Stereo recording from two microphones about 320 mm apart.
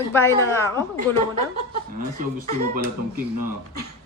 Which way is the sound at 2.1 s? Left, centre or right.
Right.